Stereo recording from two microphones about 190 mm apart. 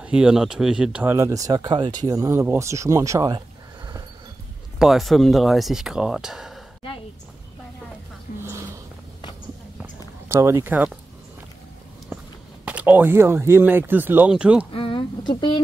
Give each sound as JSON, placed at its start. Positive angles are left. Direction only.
{"t": 0.0, "sound": "speech", "side_deg": -5}
{"t": 4.7, "sound": "speech", "side_deg": 0}
{"t": 8.3, "sound": "a sound", "side_deg": 45}
{"t": 9.8, "sound": "a sound", "side_deg": -15}
{"t": 12.6, "sound": "speech", "side_deg": -10}
{"t": 14.7, "sound": "speech", "side_deg": 25}